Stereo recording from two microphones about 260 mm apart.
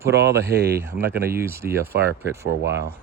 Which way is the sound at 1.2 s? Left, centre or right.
Right.